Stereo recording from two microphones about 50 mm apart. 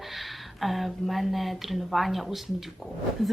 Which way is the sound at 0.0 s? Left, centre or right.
Centre.